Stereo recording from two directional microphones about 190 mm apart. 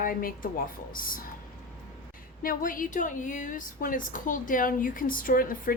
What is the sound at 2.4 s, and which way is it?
A woman's voice, 50° left (ahead or behind).